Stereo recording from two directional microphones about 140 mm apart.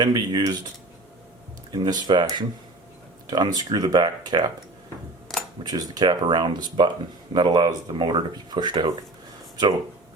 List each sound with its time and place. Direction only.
0.0 s speech: 30° right (ahead or behind)
1.7 s speech: 30° right (ahead or behind)
5.6 s speech: 25° right (ahead or behind)